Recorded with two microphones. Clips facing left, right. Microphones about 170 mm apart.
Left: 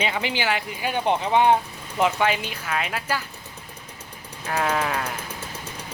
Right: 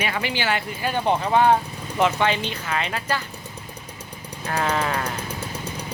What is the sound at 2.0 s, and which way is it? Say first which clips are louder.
Speech: right 1 dB; 5° left (ahead or behind).